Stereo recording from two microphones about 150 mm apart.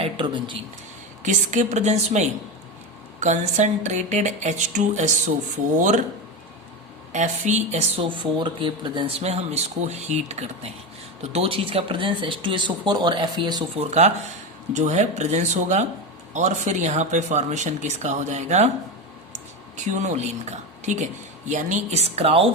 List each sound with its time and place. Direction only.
0.0 s speech: 35° right (ahead or behind)
1.2 s speech: 55° right (ahead or behind)
7.1 s speech: 50° right (ahead or behind)
8.0 s speech: 35° right (ahead or behind)
14.7 s speech: 50° right (ahead or behind)
19.7 s speech: 55° right (ahead or behind)